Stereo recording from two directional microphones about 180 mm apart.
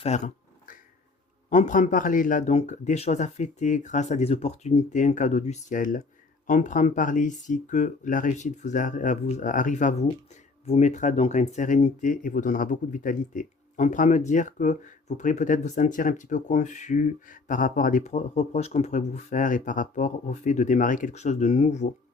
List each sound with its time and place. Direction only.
0.1 s speech: 40° left (ahead or behind)
1.5 s speech: 40° left (ahead or behind)